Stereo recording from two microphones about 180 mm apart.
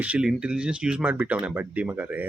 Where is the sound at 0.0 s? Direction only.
5° right (ahead or behind).